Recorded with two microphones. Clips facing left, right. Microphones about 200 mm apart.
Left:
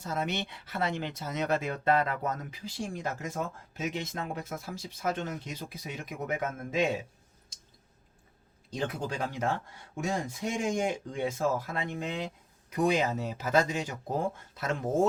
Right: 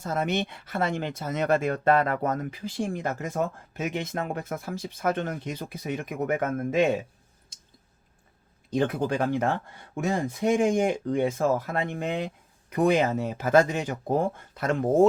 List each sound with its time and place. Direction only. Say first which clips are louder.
0.0 s speech: right 6 dB; 55° right (ahead or behind)
8.7 s speech: right 8 dB; 55° right (ahead or behind)